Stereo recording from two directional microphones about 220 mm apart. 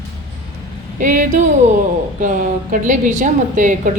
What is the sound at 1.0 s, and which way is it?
A woman's voice, 35° right (ahead or behind).